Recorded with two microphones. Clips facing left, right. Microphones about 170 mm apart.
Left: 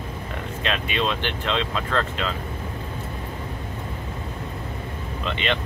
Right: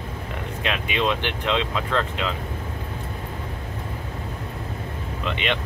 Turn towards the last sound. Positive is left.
turn(degrees=-15)  # may be behind; listen again after turning